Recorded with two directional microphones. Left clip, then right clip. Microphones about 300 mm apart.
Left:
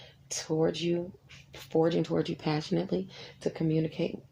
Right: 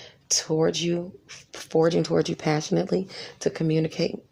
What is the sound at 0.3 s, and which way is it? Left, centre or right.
Speech, centre.